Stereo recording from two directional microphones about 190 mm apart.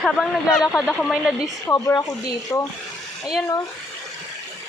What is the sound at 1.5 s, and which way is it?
Speech, 15° left (ahead or behind).